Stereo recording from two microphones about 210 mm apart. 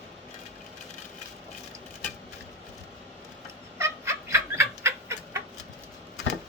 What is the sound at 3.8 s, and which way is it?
Chicken, 15° right (ahead or behind).